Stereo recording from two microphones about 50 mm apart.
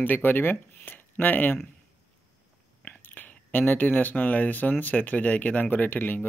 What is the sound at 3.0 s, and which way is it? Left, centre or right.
Speech, left.